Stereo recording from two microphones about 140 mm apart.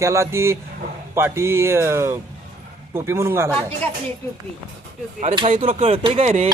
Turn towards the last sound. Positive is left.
turn(degrees=-40)  # may be behind; listen again after turning